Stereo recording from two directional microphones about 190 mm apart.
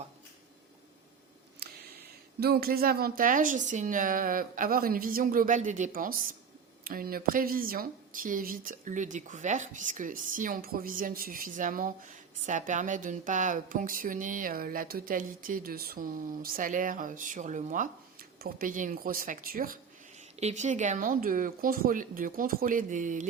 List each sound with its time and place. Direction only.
2.4 s speech: 55° right (ahead or behind)
20.4 s speech: 40° right (ahead or behind)